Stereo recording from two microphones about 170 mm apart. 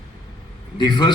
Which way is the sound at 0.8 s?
25° left (ahead or behind).